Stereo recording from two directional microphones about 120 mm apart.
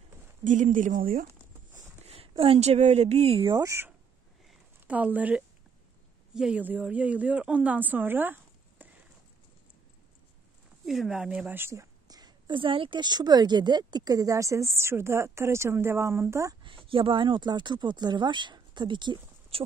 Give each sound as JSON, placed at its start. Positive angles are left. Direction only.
{"t": 0.4, "sound": "a sound", "side_deg": -90}
{"t": 2.1, "sound": "speech", "side_deg": -50}
{"t": 3.4, "sound": "speech", "side_deg": -30}
{"t": 4.7, "sound": "a woman's voice", "side_deg": -10}
{"t": 10.9, "sound": "a woman's voice", "side_deg": -5}
{"t": 16.6, "sound": "speech", "side_deg": -45}